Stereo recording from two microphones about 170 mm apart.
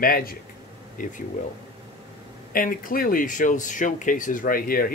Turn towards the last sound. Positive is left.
turn(degrees=60)  # may be behind; listen again after turning